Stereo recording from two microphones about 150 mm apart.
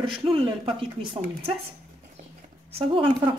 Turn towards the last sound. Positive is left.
turn(degrees=-35)  # may be behind; listen again after turning